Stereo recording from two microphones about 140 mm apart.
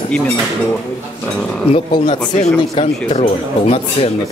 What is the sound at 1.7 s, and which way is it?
Speech, 50° left (ahead or behind).